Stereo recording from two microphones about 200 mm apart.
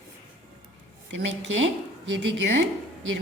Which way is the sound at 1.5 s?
70° right (ahead or behind).